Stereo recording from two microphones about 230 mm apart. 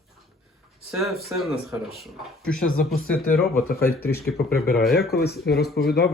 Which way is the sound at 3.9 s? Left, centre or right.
Left.